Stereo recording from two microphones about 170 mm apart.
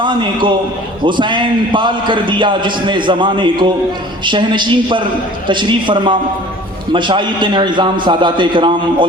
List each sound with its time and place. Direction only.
0.0 s a man's voice: 30° right (ahead or behind)